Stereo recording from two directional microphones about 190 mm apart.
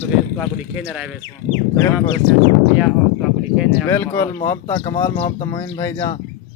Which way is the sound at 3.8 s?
10° left (ahead or behind).